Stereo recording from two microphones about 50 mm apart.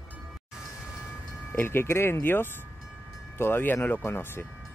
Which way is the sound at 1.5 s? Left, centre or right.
Left.